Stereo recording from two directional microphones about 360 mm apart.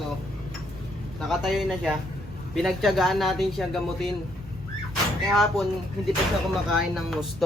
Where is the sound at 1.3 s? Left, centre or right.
Centre.